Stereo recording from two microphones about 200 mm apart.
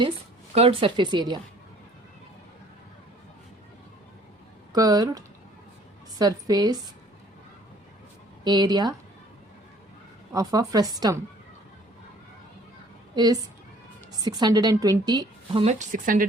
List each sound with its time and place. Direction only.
0.5 s a woman's voice: 30° right (ahead or behind)
4.7 s a woman's voice: 20° right (ahead or behind)
8.4 s a woman's voice: 20° right (ahead or behind)
10.3 s a woman's voice: 15° right (ahead or behind)
13.1 s a woman's voice: 20° right (ahead or behind)
15.6 s speech: 40° right (ahead or behind)